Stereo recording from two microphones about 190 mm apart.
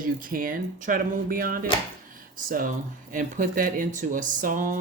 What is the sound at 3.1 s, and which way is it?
Speech, 45° right (ahead or behind).